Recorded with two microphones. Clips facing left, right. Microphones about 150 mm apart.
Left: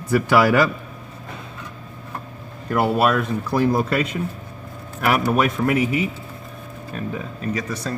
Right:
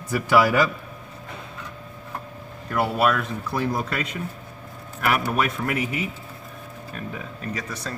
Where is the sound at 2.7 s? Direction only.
45° left (ahead or behind).